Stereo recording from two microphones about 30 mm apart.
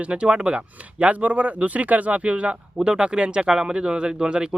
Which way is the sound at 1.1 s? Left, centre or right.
Right.